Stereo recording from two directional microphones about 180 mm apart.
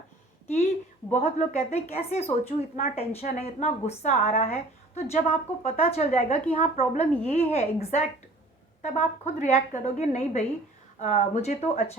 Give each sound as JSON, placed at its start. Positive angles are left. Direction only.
{"t": 0.4, "sound": "a woman's voice", "side_deg": 40}
{"t": 7.0, "sound": "a woman's voice", "side_deg": 10}
{"t": 7.3, "sound": "a woman's voice", "side_deg": 35}